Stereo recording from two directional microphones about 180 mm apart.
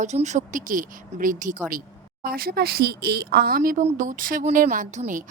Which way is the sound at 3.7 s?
45° right (ahead or behind).